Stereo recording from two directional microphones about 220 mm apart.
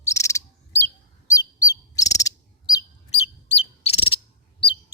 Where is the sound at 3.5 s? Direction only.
25° left (ahead or behind).